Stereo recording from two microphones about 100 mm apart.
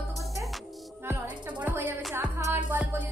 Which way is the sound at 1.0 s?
15° right (ahead or behind).